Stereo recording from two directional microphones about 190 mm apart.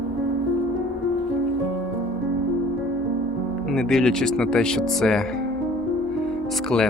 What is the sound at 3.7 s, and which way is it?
Speech, 5° left (ahead or behind).